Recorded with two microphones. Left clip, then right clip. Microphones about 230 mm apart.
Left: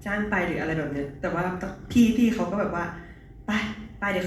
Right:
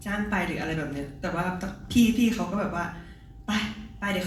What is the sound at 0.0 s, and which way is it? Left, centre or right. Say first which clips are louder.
A woman's voice: left 3 dB; centre.